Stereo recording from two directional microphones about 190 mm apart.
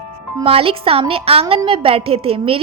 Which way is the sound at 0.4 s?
30° right (ahead or behind).